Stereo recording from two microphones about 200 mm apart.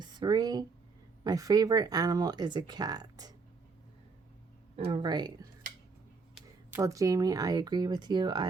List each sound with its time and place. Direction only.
0.0 s a sound: 20° right (ahead or behind)
1.2 s speech: 20° right (ahead or behind)
4.9 s speech: 20° right (ahead or behind)